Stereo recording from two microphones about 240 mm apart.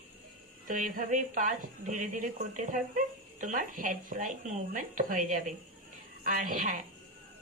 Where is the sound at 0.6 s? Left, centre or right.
Right.